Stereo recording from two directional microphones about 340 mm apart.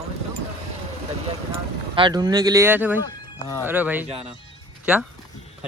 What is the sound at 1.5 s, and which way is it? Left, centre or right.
Speech, centre.